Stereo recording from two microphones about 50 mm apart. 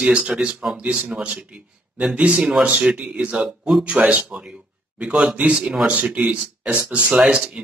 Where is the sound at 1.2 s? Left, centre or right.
Right.